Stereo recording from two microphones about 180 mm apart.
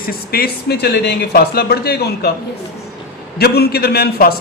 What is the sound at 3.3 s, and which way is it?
A man's voice, 60° left (ahead or behind).